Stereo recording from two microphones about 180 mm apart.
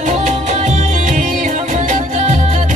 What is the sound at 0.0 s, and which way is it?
Music, 40° right (ahead or behind).